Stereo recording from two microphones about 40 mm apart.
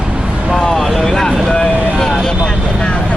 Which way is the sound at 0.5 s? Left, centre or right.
Centre.